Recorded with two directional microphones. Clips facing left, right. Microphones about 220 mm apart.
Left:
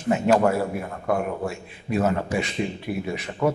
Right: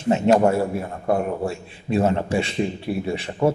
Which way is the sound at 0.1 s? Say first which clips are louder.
Right 3 dB; 25° right (ahead or behind).